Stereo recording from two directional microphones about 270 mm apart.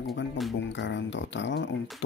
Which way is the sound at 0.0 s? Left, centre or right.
Left.